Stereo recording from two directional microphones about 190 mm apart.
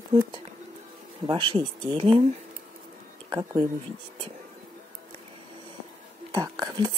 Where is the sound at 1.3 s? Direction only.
25° right (ahead or behind).